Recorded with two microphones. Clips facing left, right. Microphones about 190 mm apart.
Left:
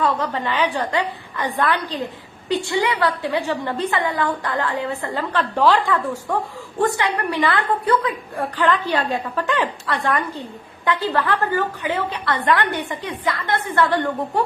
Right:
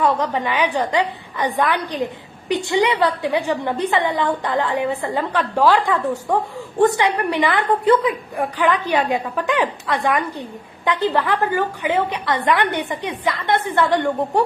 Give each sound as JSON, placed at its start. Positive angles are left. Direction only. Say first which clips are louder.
{"t": 0.0, "sound": "a woman's voice", "louder": "right 2 dB", "side_deg": -15}